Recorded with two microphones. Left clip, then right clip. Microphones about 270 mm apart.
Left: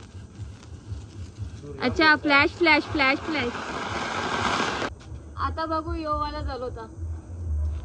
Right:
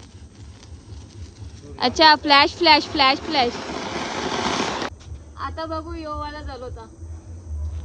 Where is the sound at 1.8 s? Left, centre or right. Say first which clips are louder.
Right 5 dB; centre.